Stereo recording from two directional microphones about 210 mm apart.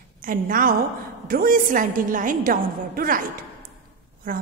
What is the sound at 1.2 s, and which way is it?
A woman's voice, 45° right (ahead or behind).